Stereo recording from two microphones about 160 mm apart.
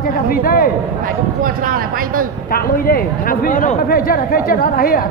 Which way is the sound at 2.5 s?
65° left (ahead or behind).